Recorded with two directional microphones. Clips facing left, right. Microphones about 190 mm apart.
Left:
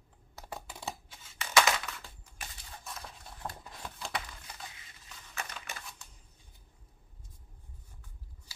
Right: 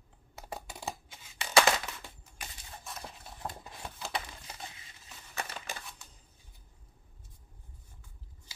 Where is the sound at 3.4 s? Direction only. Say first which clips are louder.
Right 1 dB; 20° right (ahead or behind).